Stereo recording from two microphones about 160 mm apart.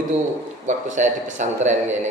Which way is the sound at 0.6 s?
50° right (ahead or behind).